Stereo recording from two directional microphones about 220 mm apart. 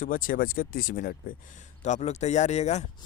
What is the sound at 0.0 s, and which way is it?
Speech, 40° left (ahead or behind).